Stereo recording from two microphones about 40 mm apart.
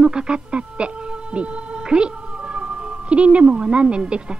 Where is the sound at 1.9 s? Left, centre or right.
Right.